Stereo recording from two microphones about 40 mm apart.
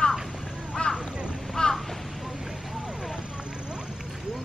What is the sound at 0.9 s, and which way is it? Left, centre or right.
Quack, right.